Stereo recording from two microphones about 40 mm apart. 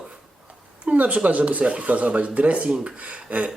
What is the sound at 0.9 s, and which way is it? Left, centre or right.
Speech, right.